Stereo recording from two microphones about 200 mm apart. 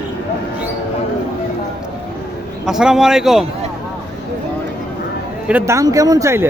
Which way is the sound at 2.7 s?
Centre (ahead or behind).